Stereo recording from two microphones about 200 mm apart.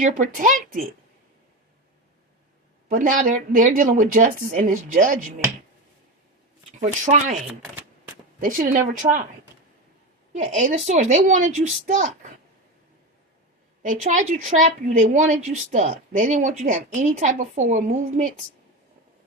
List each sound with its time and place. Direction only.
0.0 s a woman's voice: 40° right (ahead or behind)
2.9 s a woman's voice: 40° right (ahead or behind)
6.7 s a woman's voice: 35° right (ahead or behind)
7.4 s chopping: 10° right (ahead or behind)
8.4 s a woman's voice: 40° right (ahead or behind)
10.3 s a woman's voice: 35° right (ahead or behind)
13.8 s a woman's voice: 40° right (ahead or behind)